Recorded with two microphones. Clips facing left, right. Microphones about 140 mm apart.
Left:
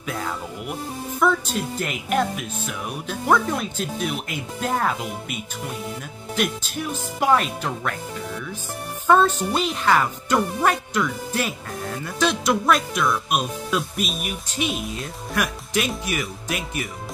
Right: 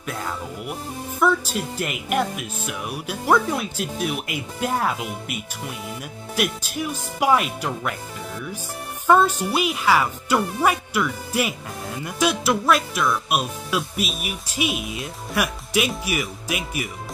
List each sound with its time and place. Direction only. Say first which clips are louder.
1.2 s speech: even; 5° right (ahead or behind)
9.0 s speech: even; 10° right (ahead or behind)